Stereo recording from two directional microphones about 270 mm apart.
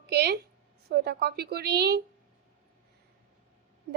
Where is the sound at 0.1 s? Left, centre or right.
Right.